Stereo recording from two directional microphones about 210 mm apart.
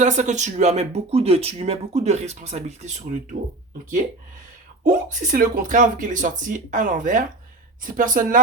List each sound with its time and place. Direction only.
0.0 s speech: 35° right (ahead or behind)
4.8 s speech: 40° right (ahead or behind)